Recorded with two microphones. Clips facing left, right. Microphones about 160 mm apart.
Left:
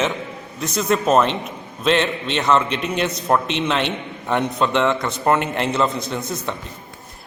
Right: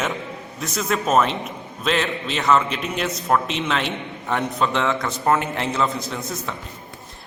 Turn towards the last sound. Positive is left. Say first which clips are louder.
# left 3 dB
turn(degrees=0)  # may be behind; listen again after turning